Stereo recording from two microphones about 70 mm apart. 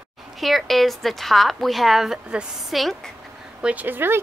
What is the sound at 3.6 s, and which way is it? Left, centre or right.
Speech, right.